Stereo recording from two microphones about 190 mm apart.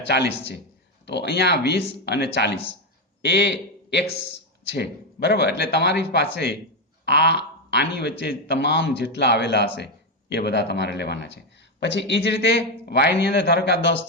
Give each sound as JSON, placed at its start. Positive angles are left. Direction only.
{"t": 0.1, "sound": "a man's voice", "side_deg": 60}